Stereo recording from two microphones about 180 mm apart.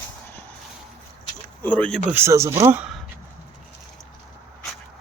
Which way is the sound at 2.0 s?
15° right (ahead or behind).